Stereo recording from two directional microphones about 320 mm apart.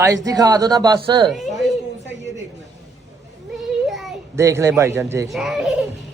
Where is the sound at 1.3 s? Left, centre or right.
Centre.